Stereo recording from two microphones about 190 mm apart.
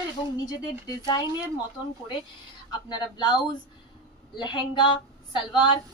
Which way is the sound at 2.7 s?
25° left (ahead or behind).